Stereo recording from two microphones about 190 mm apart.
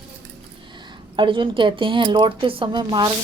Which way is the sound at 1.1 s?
25° right (ahead or behind).